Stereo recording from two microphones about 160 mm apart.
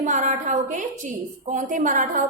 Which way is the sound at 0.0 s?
50° right (ahead or behind).